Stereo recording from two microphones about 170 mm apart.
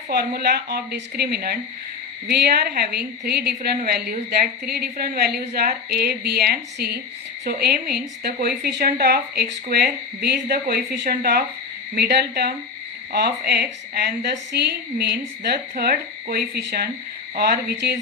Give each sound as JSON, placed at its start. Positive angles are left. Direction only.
{"t": 0.1, "sound": "a woman's voice", "side_deg": -70}
{"t": 11.9, "sound": "a woman's voice", "side_deg": -75}